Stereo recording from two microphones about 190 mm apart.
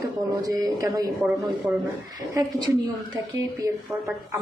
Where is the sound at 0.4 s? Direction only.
20° right (ahead or behind).